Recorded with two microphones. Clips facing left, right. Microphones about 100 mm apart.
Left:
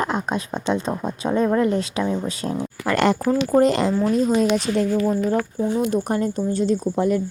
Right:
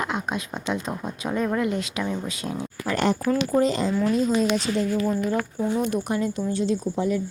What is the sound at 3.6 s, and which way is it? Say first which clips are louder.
Speech: left 6 dB; 65° left (ahead or behind).